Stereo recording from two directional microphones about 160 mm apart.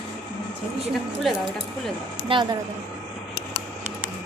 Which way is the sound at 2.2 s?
30° right (ahead or behind).